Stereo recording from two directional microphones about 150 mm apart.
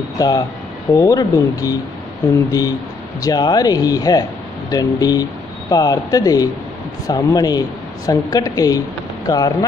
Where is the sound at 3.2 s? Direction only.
25° left (ahead or behind).